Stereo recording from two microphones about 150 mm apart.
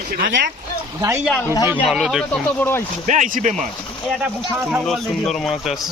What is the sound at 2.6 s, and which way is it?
Speech, 15° left (ahead or behind).